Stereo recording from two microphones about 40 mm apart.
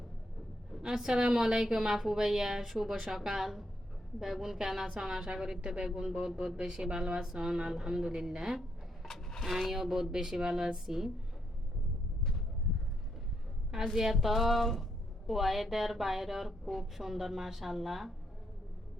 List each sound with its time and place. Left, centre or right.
0.8 s a woman's voice: centre
9.0 s a sound: centre
9.5 s a woman's voice: centre
13.9 s a woman's voice: centre